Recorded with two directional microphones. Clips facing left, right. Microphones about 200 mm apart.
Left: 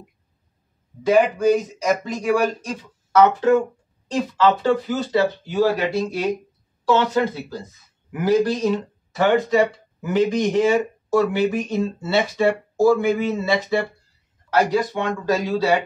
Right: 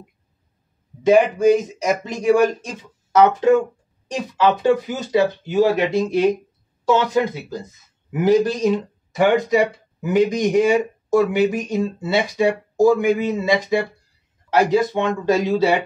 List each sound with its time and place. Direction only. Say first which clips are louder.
1.0 s speech: right 3 dB; 20° right (ahead or behind)